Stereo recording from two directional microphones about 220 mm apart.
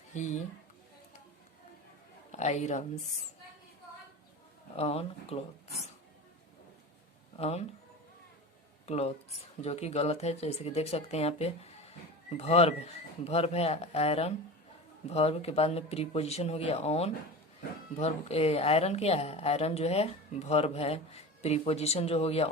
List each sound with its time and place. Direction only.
0.1 s speech: 35° left (ahead or behind)
2.3 s a woman's voice: 30° left (ahead or behind)
4.8 s a woman's voice: 25° left (ahead or behind)
7.3 s speech: 25° left (ahead or behind)
8.9 s a woman's voice: 30° left (ahead or behind)